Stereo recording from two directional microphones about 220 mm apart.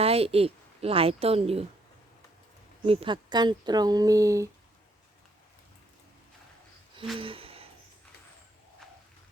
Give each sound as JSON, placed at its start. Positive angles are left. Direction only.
{"t": 0.0, "sound": "a woman's voice", "side_deg": -25}
{"t": 2.8, "sound": "speech", "side_deg": -25}
{"t": 7.2, "sound": "a sound", "side_deg": -25}